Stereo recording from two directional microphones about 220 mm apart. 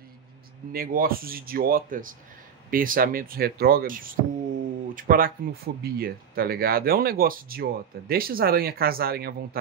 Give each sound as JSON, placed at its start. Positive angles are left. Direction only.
{"t": 0.7, "sound": "speech", "side_deg": -40}